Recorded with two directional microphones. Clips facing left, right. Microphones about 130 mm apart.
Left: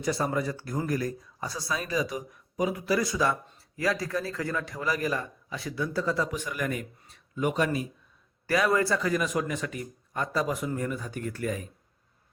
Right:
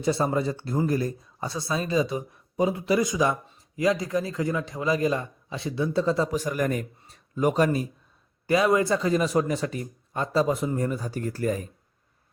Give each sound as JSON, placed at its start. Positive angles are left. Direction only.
{"t": 0.0, "sound": "a man's voice", "side_deg": -25}
{"t": 8.4, "sound": "speech", "side_deg": -20}